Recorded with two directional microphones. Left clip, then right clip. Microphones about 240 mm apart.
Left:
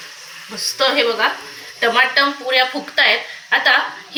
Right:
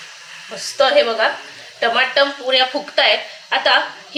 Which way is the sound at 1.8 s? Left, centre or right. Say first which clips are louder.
Left 1 dB; right.